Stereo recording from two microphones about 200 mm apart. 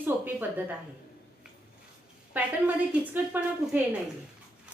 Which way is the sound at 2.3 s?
10° right (ahead or behind).